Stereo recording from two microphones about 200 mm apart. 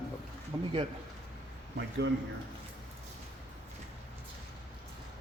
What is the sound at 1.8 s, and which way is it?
Speech, 65° right (ahead or behind).